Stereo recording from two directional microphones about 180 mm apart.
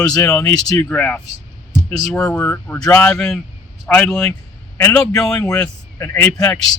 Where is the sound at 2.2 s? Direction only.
10° left (ahead or behind).